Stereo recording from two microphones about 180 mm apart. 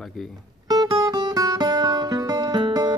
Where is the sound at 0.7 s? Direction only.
20° right (ahead or behind).